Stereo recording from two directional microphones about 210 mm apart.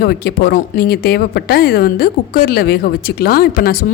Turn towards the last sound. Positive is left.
turn(degrees=45)  # may be behind; listen again after turning